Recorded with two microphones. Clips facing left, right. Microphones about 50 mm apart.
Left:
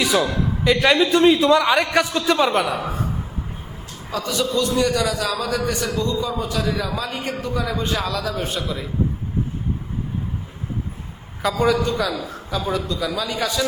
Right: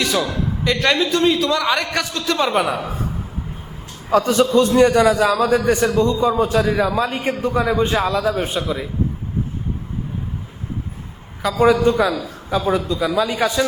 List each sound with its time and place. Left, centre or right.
0.0 s a sound: centre
0.6 s a woman's voice: centre
4.1 s a man's voice: right; by 8.9 s centre
11.6 s a man's voice: right